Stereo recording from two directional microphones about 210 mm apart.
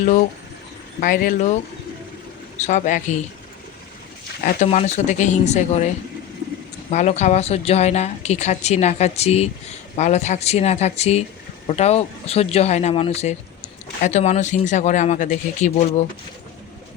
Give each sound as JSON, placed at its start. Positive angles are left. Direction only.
{"t": 1.0, "sound": "a woman's voice", "side_deg": 40}
{"t": 2.6, "sound": "a woman's voice", "side_deg": 35}
{"t": 4.4, "sound": "a woman's voice", "side_deg": 35}
{"t": 6.9, "sound": "a woman's voice", "side_deg": 35}